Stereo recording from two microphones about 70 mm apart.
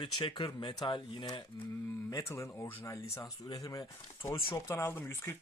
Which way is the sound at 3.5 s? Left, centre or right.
Left.